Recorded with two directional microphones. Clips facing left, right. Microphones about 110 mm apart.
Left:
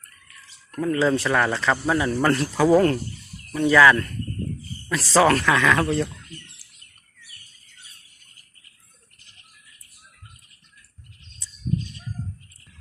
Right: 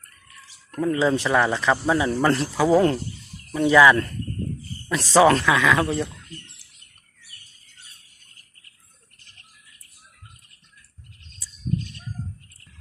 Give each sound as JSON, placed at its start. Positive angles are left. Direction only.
{"t": 0.8, "sound": "speech", "side_deg": -15}